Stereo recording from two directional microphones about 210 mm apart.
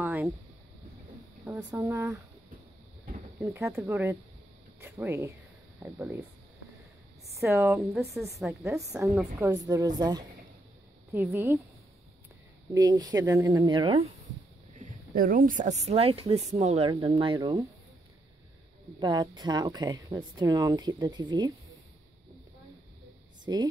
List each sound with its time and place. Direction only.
0.0 s a sound: 5° right (ahead or behind)
1.4 s speech: 10° right (ahead or behind)
3.3 s speech: 15° right (ahead or behind)
7.3 s speech: 15° right (ahead or behind)
12.7 s speech: 20° right (ahead or behind)
14.8 s a woman's voice: 40° right (ahead or behind); by 17.6 s 20° right (ahead or behind)
18.9 s speech: 20° right (ahead or behind)
23.4 s speech: 20° right (ahead or behind)